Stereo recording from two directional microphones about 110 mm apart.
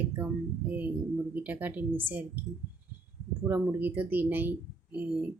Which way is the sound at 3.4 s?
20° right (ahead or behind).